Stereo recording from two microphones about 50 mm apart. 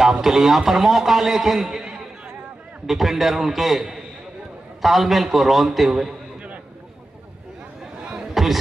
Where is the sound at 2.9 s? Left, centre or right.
Centre.